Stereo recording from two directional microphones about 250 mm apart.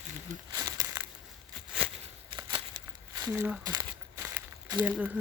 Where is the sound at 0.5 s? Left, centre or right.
Centre.